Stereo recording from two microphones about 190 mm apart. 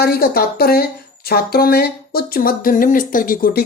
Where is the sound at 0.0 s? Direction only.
50° left (ahead or behind).